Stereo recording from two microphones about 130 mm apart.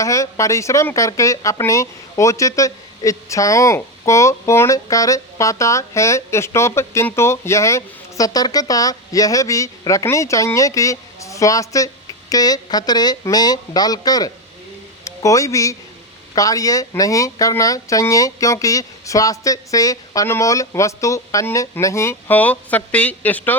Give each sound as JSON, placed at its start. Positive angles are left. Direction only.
{"t": 0.0, "sound": "speech", "side_deg": 25}